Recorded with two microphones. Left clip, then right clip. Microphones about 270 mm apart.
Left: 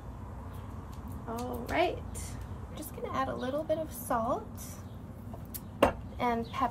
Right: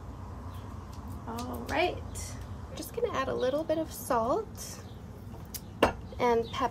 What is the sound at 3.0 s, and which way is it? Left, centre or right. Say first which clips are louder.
Chopping: right 4 dB; right.